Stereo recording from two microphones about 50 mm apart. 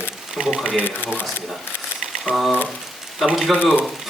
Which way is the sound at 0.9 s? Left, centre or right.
Left.